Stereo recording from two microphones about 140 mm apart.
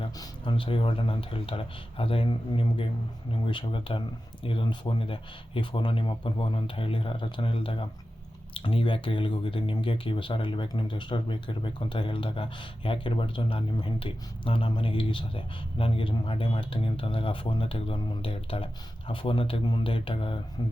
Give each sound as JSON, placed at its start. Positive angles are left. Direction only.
{"t": 0.2, "sound": "speech", "side_deg": 35}